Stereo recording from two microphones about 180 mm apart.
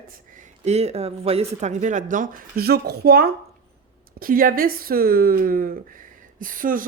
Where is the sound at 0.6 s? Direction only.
35° right (ahead or behind).